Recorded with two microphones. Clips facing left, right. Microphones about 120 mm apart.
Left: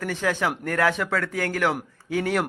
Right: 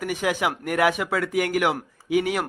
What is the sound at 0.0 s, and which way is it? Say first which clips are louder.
A man's voice: right 1 dB; 15° right (ahead or behind).